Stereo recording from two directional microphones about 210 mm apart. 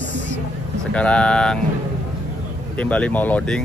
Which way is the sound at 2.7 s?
5° left (ahead or behind).